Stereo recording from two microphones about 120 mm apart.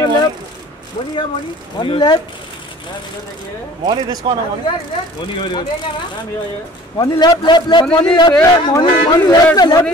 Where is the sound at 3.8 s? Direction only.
40° right (ahead or behind).